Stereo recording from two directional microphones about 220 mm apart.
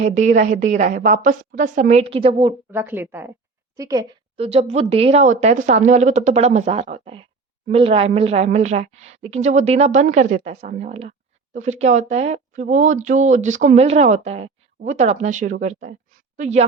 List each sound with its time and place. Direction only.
0.0 s speech: 35° right (ahead or behind)
2.7 s a woman's voice: 10° right (ahead or behind); by 16.6 s 35° right (ahead or behind)